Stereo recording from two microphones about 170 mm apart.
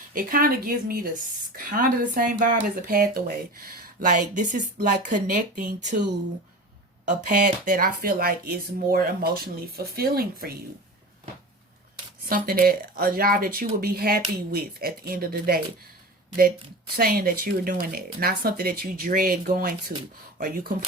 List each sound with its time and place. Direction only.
0.1 s speech: 55° right (ahead or behind)
12.2 s speech: 60° right (ahead or behind)
16.9 s speech: 60° right (ahead or behind)